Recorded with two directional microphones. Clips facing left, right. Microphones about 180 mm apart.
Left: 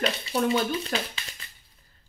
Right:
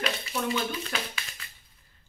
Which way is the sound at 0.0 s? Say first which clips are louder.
Left 4 dB; 30° left (ahead or behind).